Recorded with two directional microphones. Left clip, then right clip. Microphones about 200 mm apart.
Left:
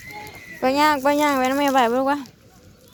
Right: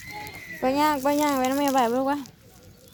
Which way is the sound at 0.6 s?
5° right (ahead or behind).